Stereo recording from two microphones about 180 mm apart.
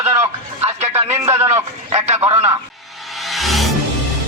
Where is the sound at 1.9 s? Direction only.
35° right (ahead or behind).